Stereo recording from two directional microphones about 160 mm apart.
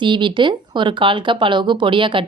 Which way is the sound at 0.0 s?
30° right (ahead or behind).